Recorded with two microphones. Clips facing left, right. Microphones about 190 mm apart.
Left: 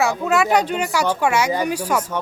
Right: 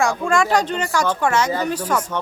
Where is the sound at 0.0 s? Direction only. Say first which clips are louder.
Even; 5° left (ahead or behind).